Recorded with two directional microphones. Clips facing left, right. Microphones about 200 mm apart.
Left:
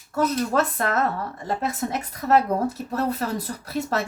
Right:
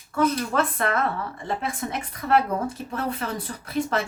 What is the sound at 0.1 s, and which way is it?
A woman's voice, 40° left (ahead or behind).